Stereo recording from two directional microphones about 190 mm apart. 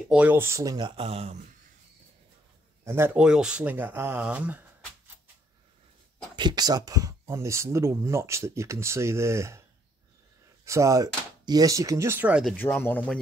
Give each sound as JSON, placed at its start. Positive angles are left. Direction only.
{"t": 0.1, "sound": "speech", "side_deg": -10}
{"t": 2.8, "sound": "speech", "side_deg": -15}
{"t": 6.3, "sound": "speech", "side_deg": -20}
{"t": 10.6, "sound": "speech", "side_deg": -15}
{"t": 12.5, "sound": "speech", "side_deg": 10}